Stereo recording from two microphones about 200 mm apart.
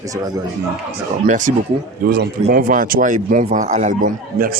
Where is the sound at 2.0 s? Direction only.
50° right (ahead or behind).